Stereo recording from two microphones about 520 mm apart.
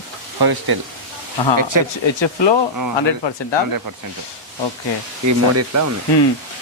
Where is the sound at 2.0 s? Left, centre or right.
Left.